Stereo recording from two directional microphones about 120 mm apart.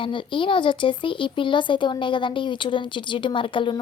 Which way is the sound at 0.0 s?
45° left (ahead or behind).